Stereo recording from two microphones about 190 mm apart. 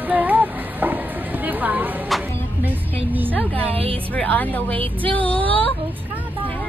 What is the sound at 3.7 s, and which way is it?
Speech, 30° right (ahead or behind).